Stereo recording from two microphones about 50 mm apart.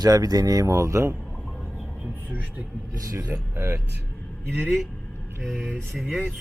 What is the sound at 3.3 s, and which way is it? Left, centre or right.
Speech, right.